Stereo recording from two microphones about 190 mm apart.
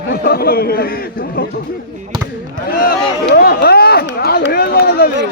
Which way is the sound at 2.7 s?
50° left (ahead or behind).